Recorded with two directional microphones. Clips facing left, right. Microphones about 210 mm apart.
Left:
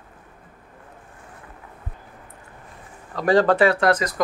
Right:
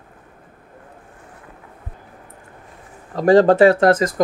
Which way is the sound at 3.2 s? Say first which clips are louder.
Right 6 dB; 45° right (ahead or behind).